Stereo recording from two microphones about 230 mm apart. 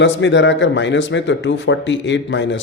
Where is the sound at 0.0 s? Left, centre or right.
Left.